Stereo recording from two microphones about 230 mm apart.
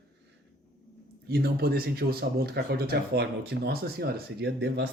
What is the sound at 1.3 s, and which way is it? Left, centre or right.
Speech, right.